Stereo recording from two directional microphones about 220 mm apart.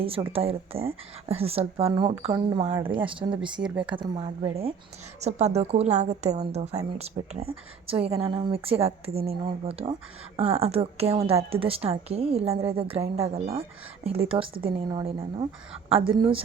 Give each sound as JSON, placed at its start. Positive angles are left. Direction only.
{"t": 0.3, "sound": "a woman's voice", "side_deg": -25}
{"t": 3.5, "sound": "a woman's voice", "side_deg": -5}
{"t": 3.9, "sound": "a woman's voice", "side_deg": -20}